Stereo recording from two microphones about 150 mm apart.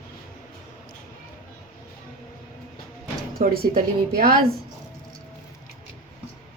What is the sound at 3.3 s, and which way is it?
A woman's voice, 85° right.